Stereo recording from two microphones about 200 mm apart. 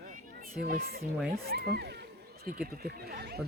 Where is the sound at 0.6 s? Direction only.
50° right (ahead or behind).